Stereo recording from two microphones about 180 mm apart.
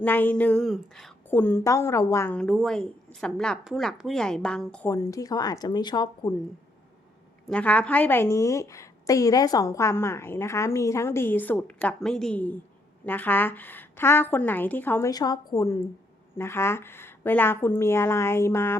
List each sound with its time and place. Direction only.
0.0 s a woman's voice: 10° left (ahead or behind)
4.9 s speech: 20° left (ahead or behind)
7.4 s a woman's voice: 5° left (ahead or behind)